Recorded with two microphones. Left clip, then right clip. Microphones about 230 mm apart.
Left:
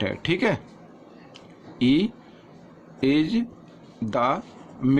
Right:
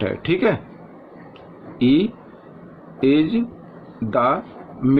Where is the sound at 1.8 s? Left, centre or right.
Left.